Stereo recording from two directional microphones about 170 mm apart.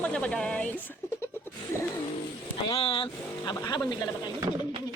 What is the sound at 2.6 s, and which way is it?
Speech, 35° left (ahead or behind).